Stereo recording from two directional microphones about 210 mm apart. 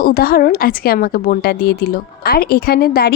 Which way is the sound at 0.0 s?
45° left (ahead or behind).